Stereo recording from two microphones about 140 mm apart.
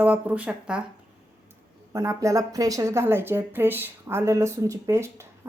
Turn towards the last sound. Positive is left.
turn(degrees=-20)  # may be behind; listen again after turning